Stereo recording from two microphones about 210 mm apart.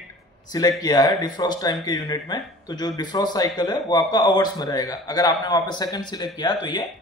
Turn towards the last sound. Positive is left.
turn(degrees=20)  # may be behind; listen again after turning